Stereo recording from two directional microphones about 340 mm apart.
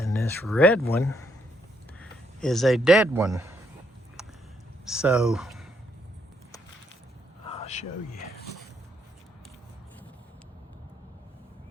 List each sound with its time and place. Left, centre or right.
0.0 s a man's voice: centre
4.9 s speech: centre
7.4 s a sound: centre